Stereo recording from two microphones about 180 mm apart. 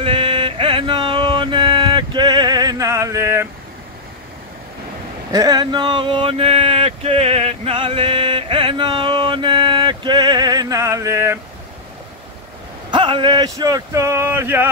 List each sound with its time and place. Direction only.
0.0 s music: 30° right (ahead or behind)
5.3 s a sound: 20° right (ahead or behind)
12.9 s speech: 30° right (ahead or behind); by 14.7 s 10° right (ahead or behind)